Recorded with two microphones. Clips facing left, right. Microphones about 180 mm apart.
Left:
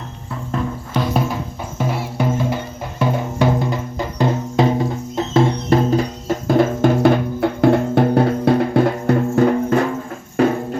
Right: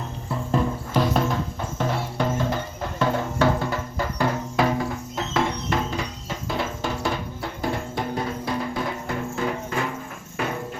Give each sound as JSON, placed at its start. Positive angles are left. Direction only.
{"t": 0.5, "sound": "music", "side_deg": 5}